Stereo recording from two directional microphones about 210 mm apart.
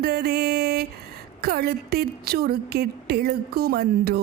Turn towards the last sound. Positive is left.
turn(degrees=-45)  # may be behind; listen again after turning